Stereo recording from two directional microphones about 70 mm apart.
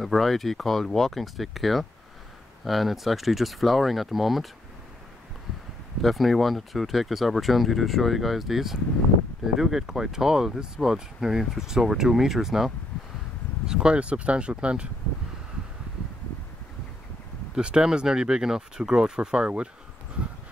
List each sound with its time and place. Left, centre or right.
0.0 s speech: centre
6.0 s speech: centre
17.6 s speech: centre